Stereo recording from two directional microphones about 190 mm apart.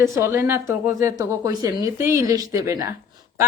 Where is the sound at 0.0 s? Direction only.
10° right (ahead or behind).